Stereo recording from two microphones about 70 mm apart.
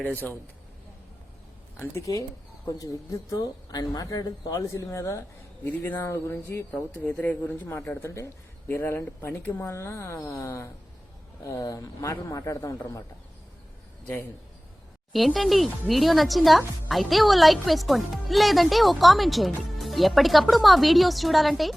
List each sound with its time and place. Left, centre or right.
1.7 s speech: left
2.6 s speech: left
3.3 s speech: left
4.6 s speech: left
5.6 s speech: left
8.7 s speech: left
15.1 s speech: centre